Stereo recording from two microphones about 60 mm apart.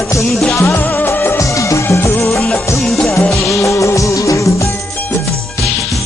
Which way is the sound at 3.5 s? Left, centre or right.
Left.